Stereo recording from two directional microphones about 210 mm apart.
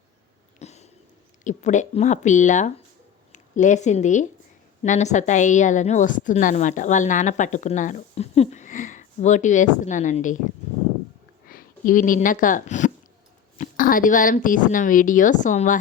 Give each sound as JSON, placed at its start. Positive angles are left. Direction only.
{"t": 0.6, "sound": "a sound", "side_deg": 30}
{"t": 1.5, "sound": "a woman's voice", "side_deg": 35}
{"t": 11.4, "sound": "a woman's voice", "side_deg": 40}